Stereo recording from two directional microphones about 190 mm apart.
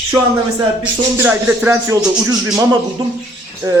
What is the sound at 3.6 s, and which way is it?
Speech, 15° right (ahead or behind).